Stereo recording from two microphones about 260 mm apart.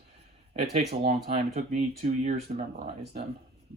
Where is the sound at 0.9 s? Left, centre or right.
Right.